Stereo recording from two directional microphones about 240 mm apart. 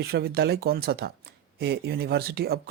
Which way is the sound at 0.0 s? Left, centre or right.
Right.